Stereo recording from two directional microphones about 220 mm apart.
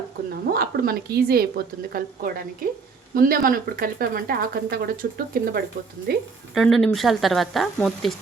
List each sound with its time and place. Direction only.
0.5 s a woman's voice: 45° right (ahead or behind)
6.5 s speech: centre (ahead or behind)